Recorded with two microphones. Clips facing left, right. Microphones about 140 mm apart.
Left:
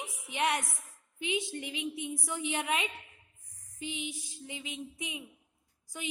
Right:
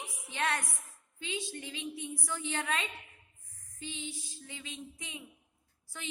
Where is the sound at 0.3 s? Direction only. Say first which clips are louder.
Left 3 dB; 20° left (ahead or behind).